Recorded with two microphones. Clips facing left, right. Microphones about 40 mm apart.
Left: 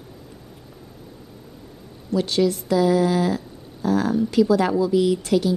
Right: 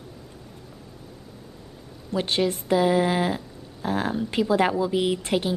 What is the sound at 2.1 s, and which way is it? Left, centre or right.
A woman's voice, right.